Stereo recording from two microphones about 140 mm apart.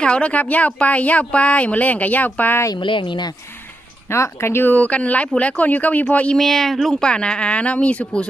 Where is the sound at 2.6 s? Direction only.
35° left (ahead or behind).